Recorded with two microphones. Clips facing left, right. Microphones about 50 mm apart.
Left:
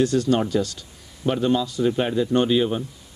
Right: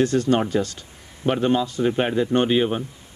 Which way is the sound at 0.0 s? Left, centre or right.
Right.